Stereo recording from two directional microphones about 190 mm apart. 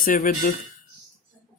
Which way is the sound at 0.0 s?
45° left (ahead or behind).